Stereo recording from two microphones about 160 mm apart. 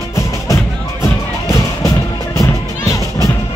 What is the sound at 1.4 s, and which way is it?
Music, 20° left (ahead or behind).